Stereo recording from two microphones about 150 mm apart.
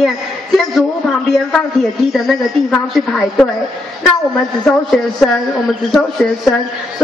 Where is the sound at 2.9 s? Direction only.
Centre (ahead or behind).